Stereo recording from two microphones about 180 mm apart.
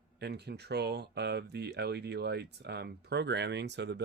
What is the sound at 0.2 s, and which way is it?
Speech, 65° right (ahead or behind).